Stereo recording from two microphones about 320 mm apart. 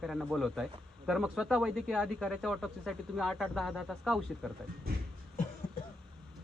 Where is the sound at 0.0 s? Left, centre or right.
Centre.